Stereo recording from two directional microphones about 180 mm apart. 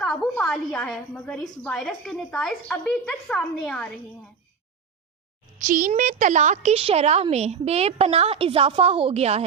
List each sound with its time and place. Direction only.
0.0 s a woman's voice: 5° left (ahead or behind)
5.5 s a child's voice: 45° right (ahead or behind)